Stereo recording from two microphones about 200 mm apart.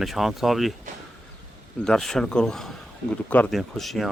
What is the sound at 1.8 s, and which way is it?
Speech, centre (ahead or behind).